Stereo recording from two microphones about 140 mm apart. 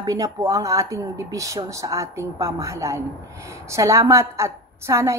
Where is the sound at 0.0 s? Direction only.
25° right (ahead or behind).